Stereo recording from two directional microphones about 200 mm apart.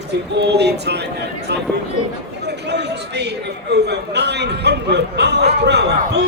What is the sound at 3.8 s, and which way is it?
Speech, 55° right (ahead or behind).